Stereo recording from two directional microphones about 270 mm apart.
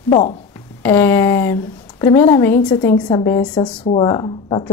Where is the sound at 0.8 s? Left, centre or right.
Centre.